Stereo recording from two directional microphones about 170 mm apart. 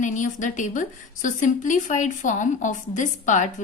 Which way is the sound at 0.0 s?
45° left (ahead or behind).